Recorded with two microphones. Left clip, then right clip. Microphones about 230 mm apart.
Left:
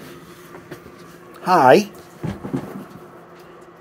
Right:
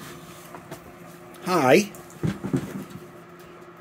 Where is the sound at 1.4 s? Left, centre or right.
Centre.